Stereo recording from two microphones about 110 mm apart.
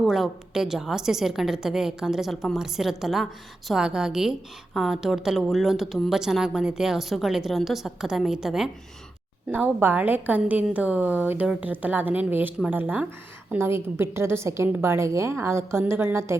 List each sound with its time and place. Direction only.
0.0 s a woman's voice: centre (ahead or behind)
9.5 s a woman's voice: 15° right (ahead or behind)